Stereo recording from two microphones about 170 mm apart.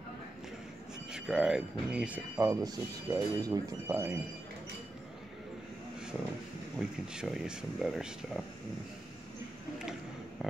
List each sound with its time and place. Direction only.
1.1 s speech: 5° right (ahead or behind)
2.4 s speech: 20° right (ahead or behind)
6.8 s speech: 5° right (ahead or behind)
10.4 s a sound: centre (ahead or behind)